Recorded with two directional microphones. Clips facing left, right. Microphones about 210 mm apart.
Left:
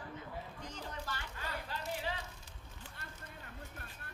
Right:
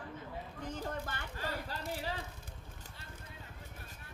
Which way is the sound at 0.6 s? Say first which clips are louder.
Right 6 dB; 55° right (ahead or behind).